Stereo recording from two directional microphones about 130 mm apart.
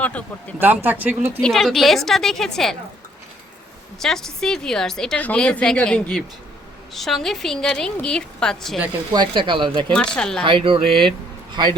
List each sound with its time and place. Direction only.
0.0 s speech: 10° left (ahead or behind)
0.6 s speech: 15° right (ahead or behind)
1.4 s a woman's voice: 5° left (ahead or behind)
4.0 s a woman's voice: 5° left (ahead or behind)
9.1 s speech: 35° right (ahead or behind)
9.9 s speech: 5° left (ahead or behind)
10.4 s speech: 45° right (ahead or behind)